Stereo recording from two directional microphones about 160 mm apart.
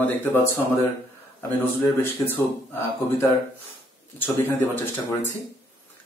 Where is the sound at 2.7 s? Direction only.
15° left (ahead or behind).